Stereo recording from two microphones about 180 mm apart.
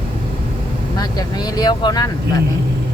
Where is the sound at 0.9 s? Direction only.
20° left (ahead or behind).